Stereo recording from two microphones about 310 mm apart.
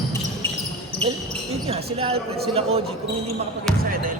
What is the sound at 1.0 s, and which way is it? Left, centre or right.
Speech, centre.